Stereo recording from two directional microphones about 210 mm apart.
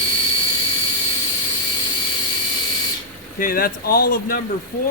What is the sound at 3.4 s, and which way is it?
Speech, 45° left (ahead or behind).